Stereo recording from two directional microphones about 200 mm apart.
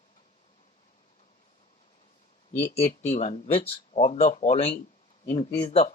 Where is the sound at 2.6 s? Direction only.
30° left (ahead or behind).